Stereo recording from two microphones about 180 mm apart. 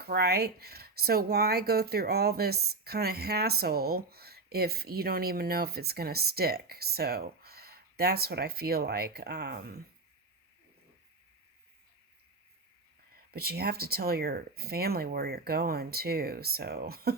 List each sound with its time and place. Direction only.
0.0 s speech: 60° right (ahead or behind)
13.3 s speech: 60° right (ahead or behind)